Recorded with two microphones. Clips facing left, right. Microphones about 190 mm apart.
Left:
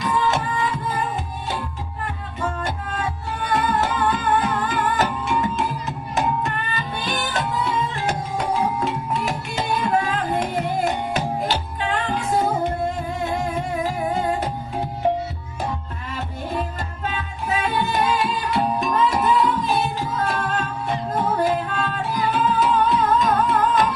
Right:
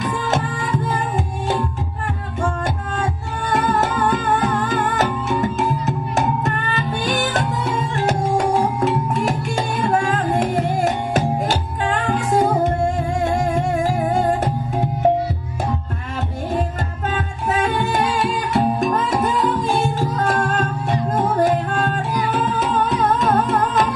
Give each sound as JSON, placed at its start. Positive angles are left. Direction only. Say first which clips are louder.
{"t": 0.1, "sound": "music", "louder": "even", "side_deg": -45}
{"t": 3.0, "sound": "music", "louder": "right 3 dB", "side_deg": -45}
{"t": 17.1, "sound": "music", "louder": "right 4 dB", "side_deg": -45}